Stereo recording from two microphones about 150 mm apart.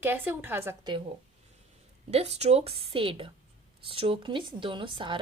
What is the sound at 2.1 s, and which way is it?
Speech, 45° right (ahead or behind).